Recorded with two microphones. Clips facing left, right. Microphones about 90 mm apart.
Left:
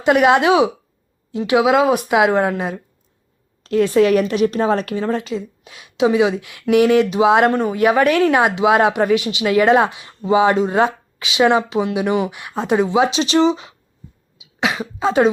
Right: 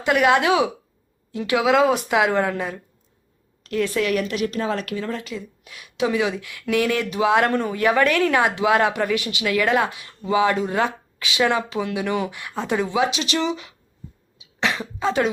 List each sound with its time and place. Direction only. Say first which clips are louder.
0.0 s a woman's voice: left 5 dB; 20° left (ahead or behind)
14.3 s cough: left 3 dB; 10° left (ahead or behind)